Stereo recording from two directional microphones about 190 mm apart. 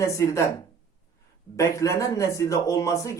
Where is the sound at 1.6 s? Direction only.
15° left (ahead or behind).